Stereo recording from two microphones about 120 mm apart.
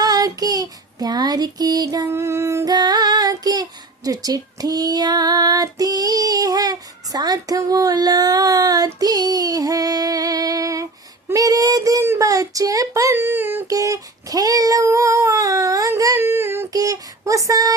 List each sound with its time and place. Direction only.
0.0 s child singing: 30° right (ahead or behind)
2.0 s child singing: 20° right (ahead or behind)
11.3 s a sound: 30° right (ahead or behind)
13.7 s child singing: 30° right (ahead or behind)